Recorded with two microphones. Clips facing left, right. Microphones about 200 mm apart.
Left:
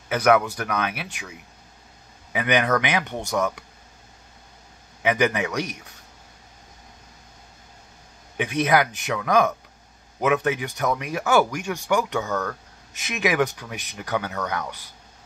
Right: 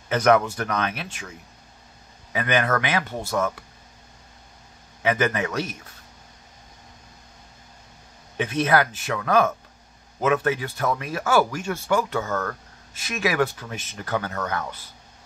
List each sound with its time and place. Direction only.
0.1 s speech: 10° left (ahead or behind)
5.0 s speech: 15° left (ahead or behind)
8.4 s speech: 15° left (ahead or behind)
12.2 s speech: centre (ahead or behind)
12.9 s speech: 20° left (ahead or behind)